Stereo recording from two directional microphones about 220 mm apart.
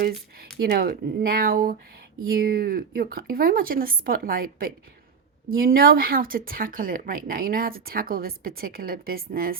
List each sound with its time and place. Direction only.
0.5 s speech: 45° right (ahead or behind)